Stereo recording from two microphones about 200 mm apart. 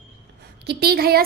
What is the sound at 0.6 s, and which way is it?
Speech, 55° right (ahead or behind).